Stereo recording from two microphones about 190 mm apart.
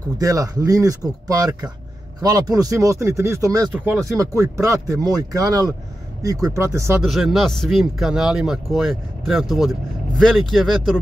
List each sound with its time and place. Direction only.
0.2 s speech: 20° right (ahead or behind)
7.1 s speech: centre (ahead or behind)